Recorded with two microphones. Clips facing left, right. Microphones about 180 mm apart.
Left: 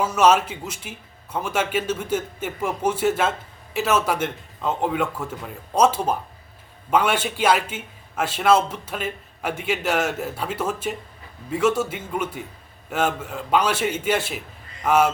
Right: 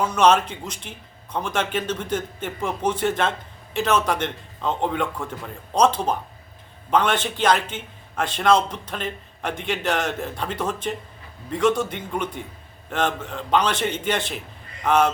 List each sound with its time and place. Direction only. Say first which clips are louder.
0.0 s a man's voice: even; 5° left (ahead or behind)